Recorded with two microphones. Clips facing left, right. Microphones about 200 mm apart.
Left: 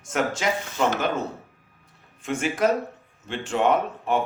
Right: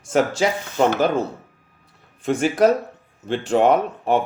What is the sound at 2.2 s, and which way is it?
Speech, 35° right (ahead or behind).